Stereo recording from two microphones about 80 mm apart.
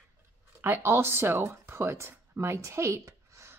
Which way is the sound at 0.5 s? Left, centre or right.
Right.